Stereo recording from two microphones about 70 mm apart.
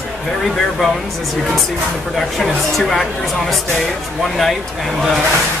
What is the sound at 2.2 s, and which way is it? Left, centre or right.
A woman's voice, centre.